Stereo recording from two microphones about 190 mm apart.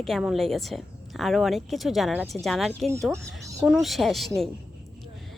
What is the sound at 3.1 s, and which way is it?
Speech, 15° right (ahead or behind).